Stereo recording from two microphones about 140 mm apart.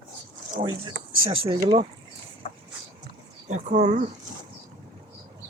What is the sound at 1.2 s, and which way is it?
Speech, 40° right (ahead or behind).